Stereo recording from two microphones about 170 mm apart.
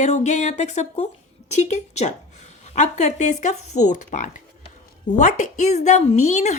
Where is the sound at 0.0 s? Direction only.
45° left (ahead or behind).